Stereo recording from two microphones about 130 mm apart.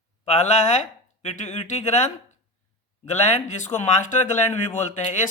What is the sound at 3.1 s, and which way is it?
Speech, 60° left (ahead or behind).